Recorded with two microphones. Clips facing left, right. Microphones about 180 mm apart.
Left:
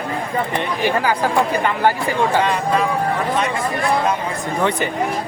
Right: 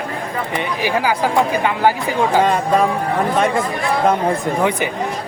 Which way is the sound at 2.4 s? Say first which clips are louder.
Right 3 dB; 45° right (ahead or behind).